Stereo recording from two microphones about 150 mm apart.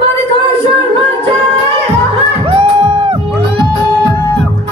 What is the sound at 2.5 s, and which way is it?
Music, 40° right (ahead or behind).